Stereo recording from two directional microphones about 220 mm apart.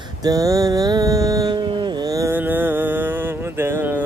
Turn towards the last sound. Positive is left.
turn(degrees=-10)  # may be behind; listen again after turning